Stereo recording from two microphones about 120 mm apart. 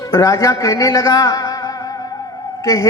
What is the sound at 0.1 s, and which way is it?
A man's voice, 30° left (ahead or behind).